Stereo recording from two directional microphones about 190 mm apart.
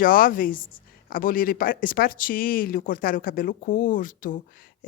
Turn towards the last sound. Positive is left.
turn(degrees=45)  # may be behind; listen again after turning